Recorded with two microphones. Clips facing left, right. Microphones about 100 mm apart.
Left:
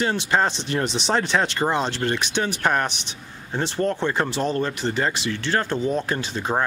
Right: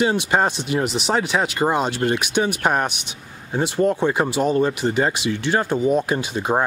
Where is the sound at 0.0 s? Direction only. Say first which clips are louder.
Right 3 dB; 15° right (ahead or behind).